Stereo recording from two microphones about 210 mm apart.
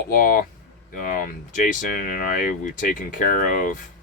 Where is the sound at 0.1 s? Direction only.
45° left (ahead or behind).